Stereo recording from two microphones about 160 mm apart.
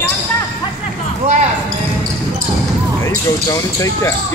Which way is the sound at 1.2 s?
45° right (ahead or behind).